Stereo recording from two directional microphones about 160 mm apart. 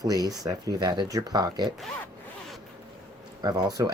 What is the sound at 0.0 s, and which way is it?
Speech, 25° right (ahead or behind).